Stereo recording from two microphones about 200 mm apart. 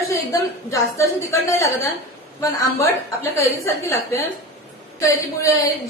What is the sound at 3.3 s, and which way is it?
A woman's voice, 15° left (ahead or behind).